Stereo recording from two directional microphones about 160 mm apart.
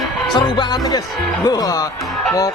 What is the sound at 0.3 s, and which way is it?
Speech, 30° left (ahead or behind).